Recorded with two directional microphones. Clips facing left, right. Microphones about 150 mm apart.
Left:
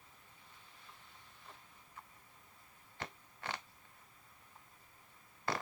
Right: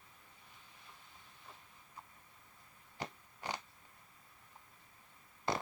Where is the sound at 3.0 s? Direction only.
15° right (ahead or behind).